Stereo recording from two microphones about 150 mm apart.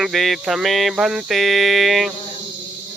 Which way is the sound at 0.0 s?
Centre (ahead or behind).